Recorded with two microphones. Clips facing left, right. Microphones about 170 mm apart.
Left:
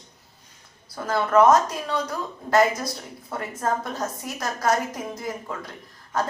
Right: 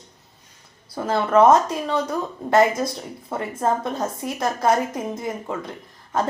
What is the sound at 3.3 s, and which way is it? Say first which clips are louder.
Speech: right 4 dB; 25° right (ahead or behind).